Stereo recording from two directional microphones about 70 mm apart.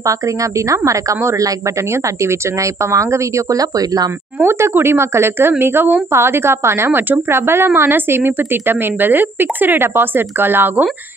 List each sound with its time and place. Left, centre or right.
0.0 s speech: right
4.4 s a woman's voice: right